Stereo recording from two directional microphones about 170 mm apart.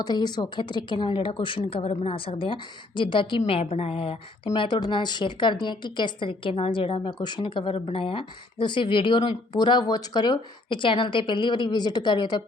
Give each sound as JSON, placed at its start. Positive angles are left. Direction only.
{"t": 0.0, "sound": "a woman's voice", "side_deg": 25}